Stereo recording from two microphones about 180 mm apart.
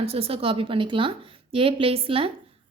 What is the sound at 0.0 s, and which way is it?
A woman's voice, 30° right (ahead or behind).